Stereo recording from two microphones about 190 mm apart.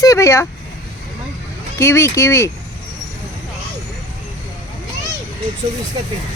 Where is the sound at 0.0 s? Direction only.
15° left (ahead or behind).